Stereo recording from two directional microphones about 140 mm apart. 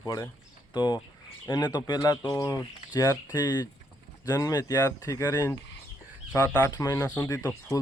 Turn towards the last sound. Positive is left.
turn(degrees=25)  # may be behind; listen again after turning